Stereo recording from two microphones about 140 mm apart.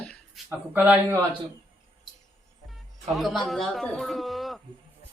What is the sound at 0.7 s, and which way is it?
Speech, 10° right (ahead or behind).